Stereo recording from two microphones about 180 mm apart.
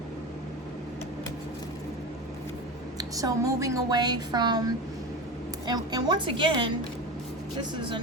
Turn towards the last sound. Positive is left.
turn(degrees=-30)  # may be behind; listen again after turning